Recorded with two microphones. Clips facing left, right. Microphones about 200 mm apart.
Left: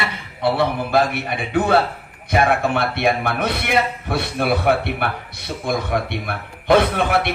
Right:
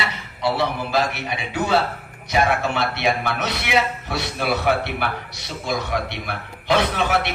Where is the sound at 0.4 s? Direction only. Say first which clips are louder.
Left 3 dB; 55° left (ahead or behind).